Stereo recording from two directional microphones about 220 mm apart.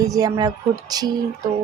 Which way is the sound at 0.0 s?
15° right (ahead or behind).